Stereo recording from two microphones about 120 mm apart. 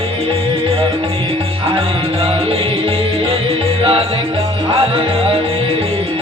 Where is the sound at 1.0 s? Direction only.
50° right (ahead or behind).